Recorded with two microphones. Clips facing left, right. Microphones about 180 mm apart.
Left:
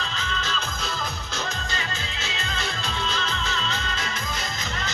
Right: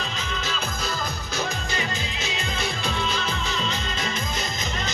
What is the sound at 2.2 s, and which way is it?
Music, 15° right (ahead or behind).